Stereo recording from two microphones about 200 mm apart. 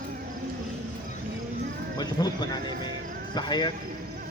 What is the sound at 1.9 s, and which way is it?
Speech, 20° left (ahead or behind).